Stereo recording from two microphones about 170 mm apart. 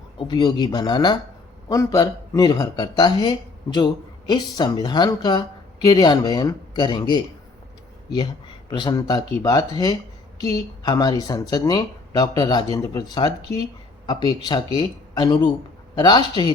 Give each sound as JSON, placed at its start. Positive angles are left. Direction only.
{"t": 0.3, "sound": "speech", "side_deg": 25}
{"t": 8.7, "sound": "speech", "side_deg": 25}